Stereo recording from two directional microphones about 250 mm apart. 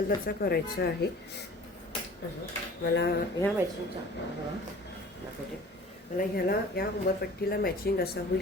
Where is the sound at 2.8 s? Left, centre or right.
Left.